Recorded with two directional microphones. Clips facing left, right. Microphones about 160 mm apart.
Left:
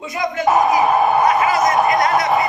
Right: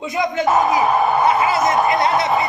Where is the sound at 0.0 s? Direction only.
20° right (ahead or behind).